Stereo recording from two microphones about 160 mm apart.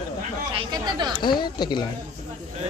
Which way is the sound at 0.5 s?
30° right (ahead or behind).